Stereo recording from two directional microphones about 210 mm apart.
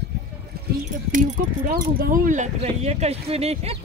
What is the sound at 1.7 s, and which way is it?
Speech, 45° right (ahead or behind).